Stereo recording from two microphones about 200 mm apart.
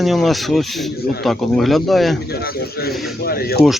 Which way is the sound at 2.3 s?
50° left (ahead or behind).